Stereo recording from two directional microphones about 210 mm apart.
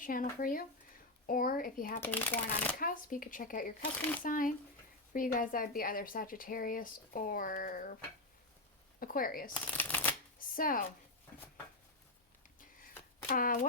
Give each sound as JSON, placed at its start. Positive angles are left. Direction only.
{"t": 0.0, "sound": "a woman's voice", "side_deg": 40}
{"t": 2.0, "sound": "speech", "side_deg": 10}
{"t": 2.7, "sound": "speech", "side_deg": 40}
{"t": 9.0, "sound": "a woman's voice", "side_deg": 45}
{"t": 9.7, "sound": "shuffling cards", "side_deg": 10}
{"t": 10.3, "sound": "chopping", "side_deg": 40}
{"t": 13.2, "sound": "a woman's voice", "side_deg": 40}